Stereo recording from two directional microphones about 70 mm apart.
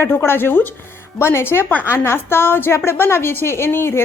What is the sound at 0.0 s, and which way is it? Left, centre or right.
A woman's voice, left.